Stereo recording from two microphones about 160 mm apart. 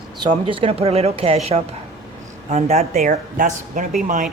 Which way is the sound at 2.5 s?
40° right (ahead or behind).